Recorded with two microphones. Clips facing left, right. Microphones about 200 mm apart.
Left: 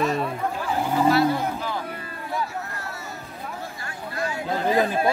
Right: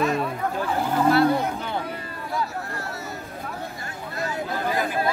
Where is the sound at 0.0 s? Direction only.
Centre (ahead or behind).